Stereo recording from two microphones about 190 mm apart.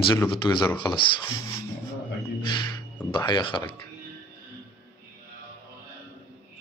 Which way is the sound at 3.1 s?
25° left (ahead or behind).